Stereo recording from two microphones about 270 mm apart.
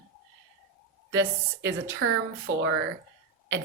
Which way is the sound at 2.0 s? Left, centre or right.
Right.